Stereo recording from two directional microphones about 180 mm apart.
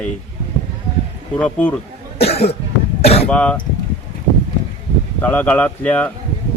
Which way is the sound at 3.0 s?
35° left (ahead or behind).